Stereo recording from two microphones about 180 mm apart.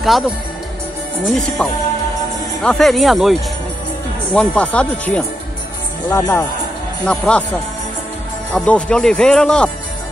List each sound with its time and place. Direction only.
0.0 s speech: centre (ahead or behind)
8.5 s speech: 5° left (ahead or behind)